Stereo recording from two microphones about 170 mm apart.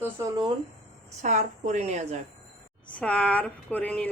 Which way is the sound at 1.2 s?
45° right (ahead or behind).